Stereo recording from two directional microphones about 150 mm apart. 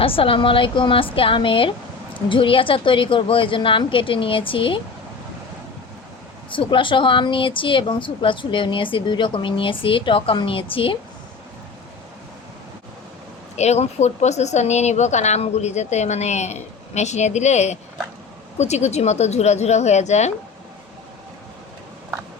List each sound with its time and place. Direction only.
0.0 s a woman's voice: 35° left (ahead or behind)
6.5 s a woman's voice: 35° left (ahead or behind)
13.6 s speech: 45° left (ahead or behind)